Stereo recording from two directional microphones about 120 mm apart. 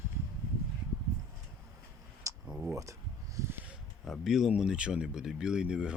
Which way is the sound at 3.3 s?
20° right (ahead or behind).